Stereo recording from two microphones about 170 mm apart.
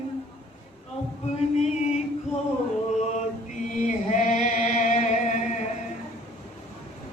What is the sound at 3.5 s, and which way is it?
Chant, 45° left (ahead or behind).